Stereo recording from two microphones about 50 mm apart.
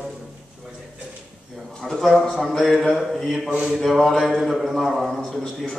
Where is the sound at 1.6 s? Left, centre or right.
Centre.